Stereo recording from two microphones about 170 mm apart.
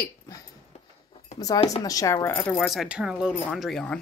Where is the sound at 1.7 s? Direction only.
20° left (ahead or behind).